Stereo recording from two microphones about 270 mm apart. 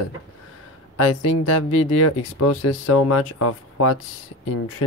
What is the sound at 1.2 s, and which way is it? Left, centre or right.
Speech, left.